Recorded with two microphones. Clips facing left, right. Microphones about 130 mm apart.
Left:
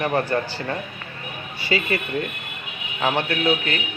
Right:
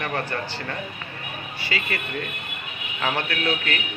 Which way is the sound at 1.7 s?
30° left (ahead or behind).